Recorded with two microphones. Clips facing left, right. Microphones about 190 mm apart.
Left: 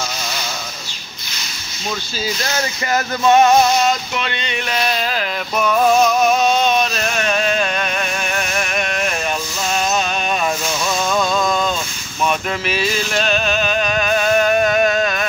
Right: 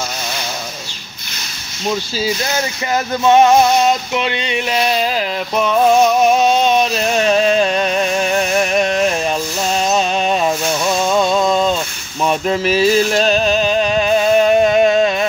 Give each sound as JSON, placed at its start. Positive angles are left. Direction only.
{"t": 2.5, "sound": "speech", "side_deg": -20}
{"t": 4.2, "sound": "a sound", "side_deg": -15}
{"t": 7.0, "sound": "music", "side_deg": -25}